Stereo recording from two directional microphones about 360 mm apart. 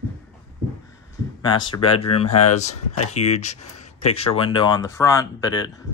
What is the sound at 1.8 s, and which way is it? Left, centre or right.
Speech, centre.